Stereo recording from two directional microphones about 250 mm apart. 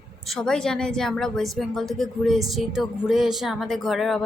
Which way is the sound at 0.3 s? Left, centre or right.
Centre.